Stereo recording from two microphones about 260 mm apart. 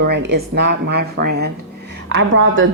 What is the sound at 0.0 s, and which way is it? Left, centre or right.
A woman's voice, right.